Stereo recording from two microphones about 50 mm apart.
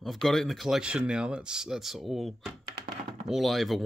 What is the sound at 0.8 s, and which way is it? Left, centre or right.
Speech, centre.